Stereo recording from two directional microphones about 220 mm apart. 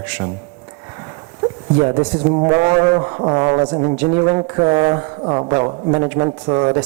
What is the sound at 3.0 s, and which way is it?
Speech, 25° right (ahead or behind).